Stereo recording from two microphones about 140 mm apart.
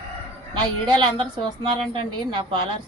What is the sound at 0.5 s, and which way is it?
A woman's voice, 30° right (ahead or behind).